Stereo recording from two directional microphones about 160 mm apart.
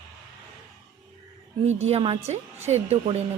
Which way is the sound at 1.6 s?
40° right (ahead or behind).